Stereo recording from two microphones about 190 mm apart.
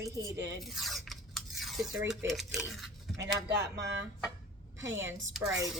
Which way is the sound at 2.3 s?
Centre (ahead or behind).